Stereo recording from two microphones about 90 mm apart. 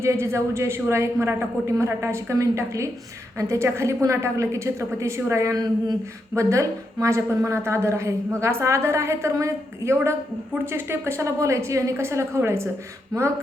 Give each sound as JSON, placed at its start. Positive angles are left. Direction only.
{"t": 0.0, "sound": "a woman's voice", "side_deg": -30}